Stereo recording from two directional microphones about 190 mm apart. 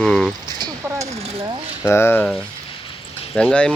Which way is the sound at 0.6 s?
20° right (ahead or behind).